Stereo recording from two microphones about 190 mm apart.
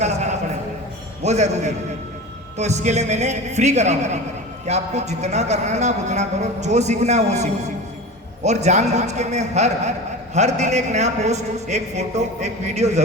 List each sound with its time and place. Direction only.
1.2 s a man's voice: 35° right (ahead or behind)